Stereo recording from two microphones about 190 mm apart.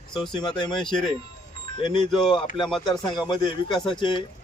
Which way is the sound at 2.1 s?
Centre (ahead or behind).